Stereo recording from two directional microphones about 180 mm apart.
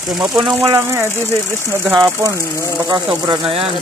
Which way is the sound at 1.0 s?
15° left (ahead or behind).